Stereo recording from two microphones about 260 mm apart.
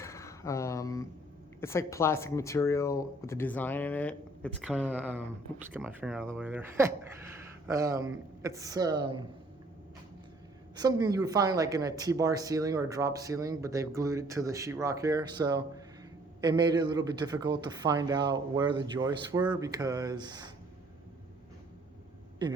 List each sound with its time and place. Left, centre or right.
0.0 s a sound: centre
1.6 s speech: centre
4.9 s speech: centre
10.8 s speech: centre